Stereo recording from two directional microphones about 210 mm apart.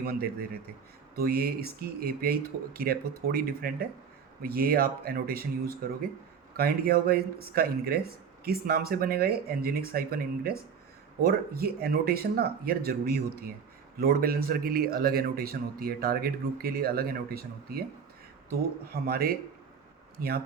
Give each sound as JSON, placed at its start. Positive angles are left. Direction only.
{"t": 0.0, "sound": "a man's voice", "side_deg": -45}
{"t": 18.9, "sound": "a man's voice", "side_deg": -45}